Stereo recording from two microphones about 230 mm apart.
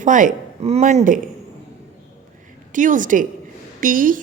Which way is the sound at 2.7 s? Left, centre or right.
Right.